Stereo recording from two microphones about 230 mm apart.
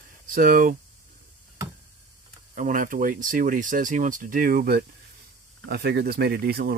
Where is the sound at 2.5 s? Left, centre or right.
Right.